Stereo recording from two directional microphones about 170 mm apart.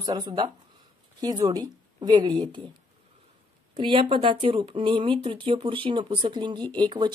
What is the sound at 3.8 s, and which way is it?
Speech, 30° right (ahead or behind).